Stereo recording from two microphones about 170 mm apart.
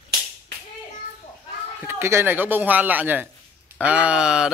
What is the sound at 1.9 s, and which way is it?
Speech, 15° right (ahead or behind).